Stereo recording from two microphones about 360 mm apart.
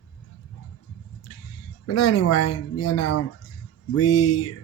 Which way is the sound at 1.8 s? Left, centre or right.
Left.